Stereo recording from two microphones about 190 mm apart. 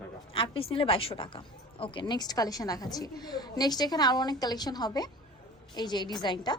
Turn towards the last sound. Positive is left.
turn(degrees=25)  # may be behind; listen again after turning